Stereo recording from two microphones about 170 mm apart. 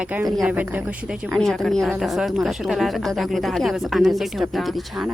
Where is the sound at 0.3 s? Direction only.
Centre (ahead or behind).